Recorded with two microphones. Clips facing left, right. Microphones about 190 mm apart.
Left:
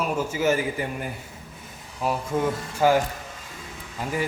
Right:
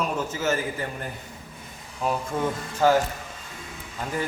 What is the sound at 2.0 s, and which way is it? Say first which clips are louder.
Speech: left 1 dB; 5° left (ahead or behind).